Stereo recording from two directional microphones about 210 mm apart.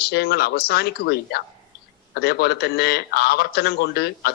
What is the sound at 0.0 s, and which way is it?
A man's voice, 50° left (ahead or behind).